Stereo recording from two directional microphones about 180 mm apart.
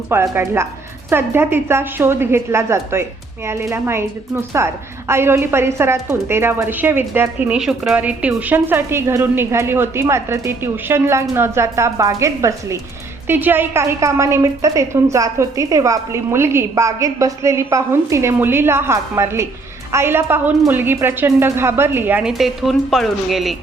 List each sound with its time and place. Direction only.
0.1 s a woman's voice: 15° right (ahead or behind)